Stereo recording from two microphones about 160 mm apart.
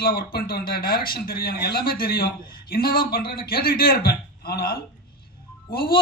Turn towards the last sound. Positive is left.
turn(degrees=65)  # may be behind; listen again after turning